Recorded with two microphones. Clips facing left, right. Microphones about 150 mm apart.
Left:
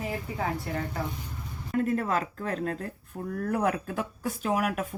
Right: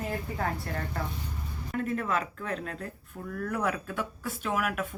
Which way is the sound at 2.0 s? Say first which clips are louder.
Left 2 dB; 35° left (ahead or behind).